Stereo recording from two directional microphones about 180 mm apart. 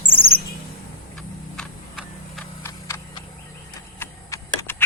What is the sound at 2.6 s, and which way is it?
Clock, 15° left (ahead or behind).